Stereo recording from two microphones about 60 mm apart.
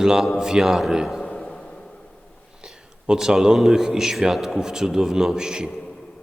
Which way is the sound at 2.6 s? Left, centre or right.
Centre.